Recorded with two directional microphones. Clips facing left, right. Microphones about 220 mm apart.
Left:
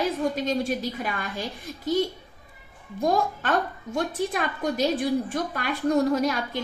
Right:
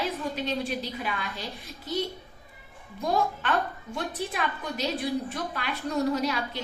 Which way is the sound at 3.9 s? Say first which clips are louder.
Left 5 dB; 45° left (ahead or behind).